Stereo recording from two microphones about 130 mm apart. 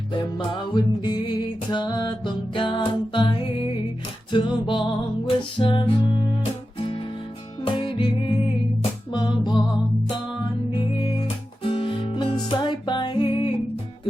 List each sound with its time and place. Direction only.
0.1 s music: 35° left (ahead or behind)
7.6 s music: 40° left (ahead or behind)
9.1 s music: 35° left (ahead or behind)
10.7 s music: 45° left (ahead or behind)